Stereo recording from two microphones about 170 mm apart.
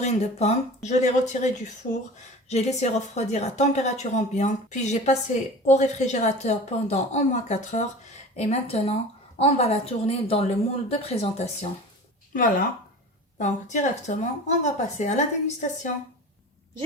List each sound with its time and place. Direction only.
0.0 s a woman's voice: 40° left (ahead or behind)
2.5 s a woman's voice: 40° left (ahead or behind)
12.3 s a woman's voice: 55° left (ahead or behind)